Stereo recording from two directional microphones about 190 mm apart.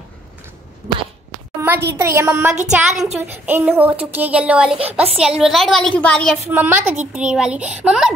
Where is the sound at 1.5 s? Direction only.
10° right (ahead or behind); by 6.4 s 5° left (ahead or behind).